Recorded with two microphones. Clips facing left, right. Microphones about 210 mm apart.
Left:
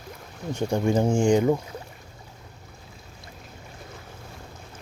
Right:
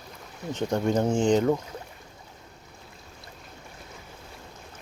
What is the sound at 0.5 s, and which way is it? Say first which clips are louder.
Speech: left 2 dB; 10° left (ahead or behind).